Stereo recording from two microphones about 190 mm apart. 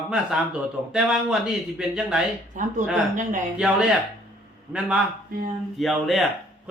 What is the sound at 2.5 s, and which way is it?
Speech, 40° right (ahead or behind).